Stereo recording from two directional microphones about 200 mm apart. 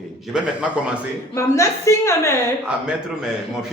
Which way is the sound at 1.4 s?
15° left (ahead or behind).